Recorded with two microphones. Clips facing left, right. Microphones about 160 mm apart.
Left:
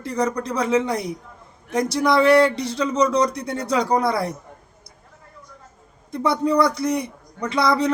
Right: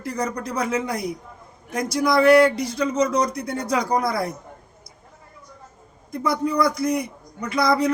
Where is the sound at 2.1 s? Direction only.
30° left (ahead or behind).